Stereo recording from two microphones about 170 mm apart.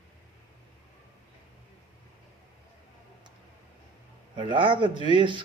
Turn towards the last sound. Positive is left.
turn(degrees=-30)  # may be behind; listen again after turning